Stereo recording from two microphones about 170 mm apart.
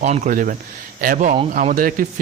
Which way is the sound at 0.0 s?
50° right (ahead or behind).